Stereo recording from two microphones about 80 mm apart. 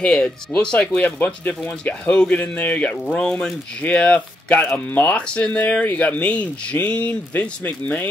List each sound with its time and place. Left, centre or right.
0.0 s speech: centre